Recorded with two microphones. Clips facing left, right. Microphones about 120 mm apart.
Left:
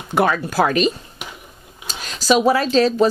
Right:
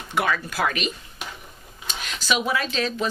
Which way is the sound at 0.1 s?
40° left (ahead or behind).